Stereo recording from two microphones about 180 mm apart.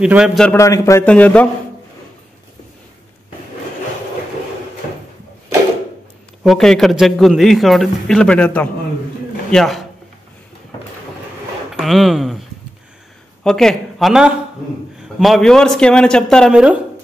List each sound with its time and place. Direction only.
0.0 s a man's voice: 5° right (ahead or behind)
0.6 s a man's voice: 15° left (ahead or behind)
6.4 s a man's voice: centre (ahead or behind)
11.8 s a man's voice: centre (ahead or behind)
13.4 s a man's voice: 5° left (ahead or behind)